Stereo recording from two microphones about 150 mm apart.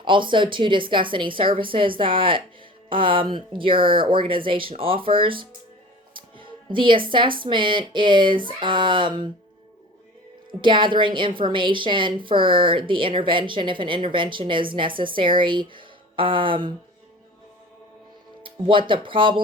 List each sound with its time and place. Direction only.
0.0 s a woman's voice: 35° right (ahead or behind)
6.1 s music: 35° right (ahead or behind)
7.1 s a woman's voice: 35° right (ahead or behind)
10.6 s a woman's voice: 35° right (ahead or behind)
18.4 s a woman's voice: 35° right (ahead or behind)